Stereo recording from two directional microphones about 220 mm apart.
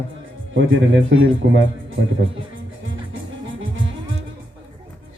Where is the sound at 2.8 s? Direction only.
60° right (ahead or behind).